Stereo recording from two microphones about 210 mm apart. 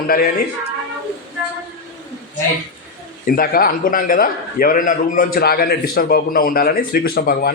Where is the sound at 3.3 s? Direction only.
45° left (ahead or behind).